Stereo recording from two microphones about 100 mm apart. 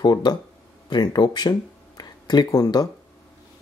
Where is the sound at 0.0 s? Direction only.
45° left (ahead or behind).